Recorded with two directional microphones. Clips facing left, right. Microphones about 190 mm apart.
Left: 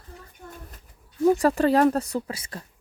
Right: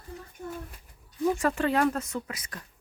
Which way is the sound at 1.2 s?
35° left (ahead or behind).